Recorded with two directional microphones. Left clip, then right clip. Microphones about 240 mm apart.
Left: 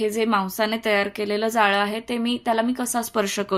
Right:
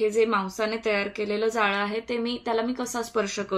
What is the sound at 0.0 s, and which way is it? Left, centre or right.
A woman's voice, left.